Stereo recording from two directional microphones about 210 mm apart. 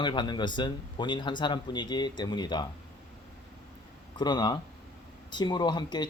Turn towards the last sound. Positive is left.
turn(degrees=20)  # may be behind; listen again after turning